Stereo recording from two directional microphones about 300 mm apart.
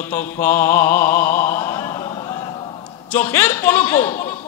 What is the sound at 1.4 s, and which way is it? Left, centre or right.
Chant, centre.